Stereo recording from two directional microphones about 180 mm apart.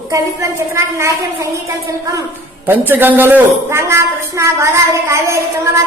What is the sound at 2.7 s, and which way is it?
A woman's voice, 10° right (ahead or behind).